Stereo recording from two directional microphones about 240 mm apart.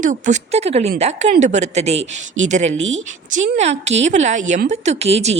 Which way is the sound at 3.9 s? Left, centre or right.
Right.